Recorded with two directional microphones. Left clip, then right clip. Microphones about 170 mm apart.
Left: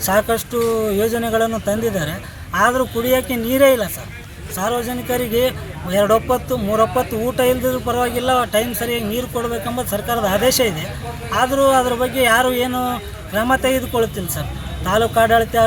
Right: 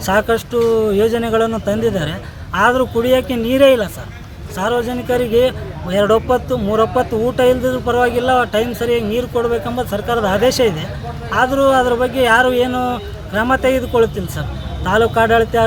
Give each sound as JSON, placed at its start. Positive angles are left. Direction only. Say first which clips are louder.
{"t": 0.0, "sound": "speech", "louder": "right 2 dB", "side_deg": -5}